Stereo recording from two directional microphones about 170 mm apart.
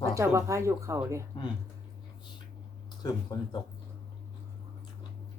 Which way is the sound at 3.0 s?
25° left (ahead or behind).